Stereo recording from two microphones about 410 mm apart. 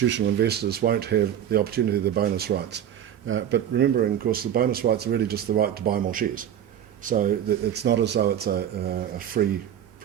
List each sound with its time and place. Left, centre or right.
0.1 s speech: right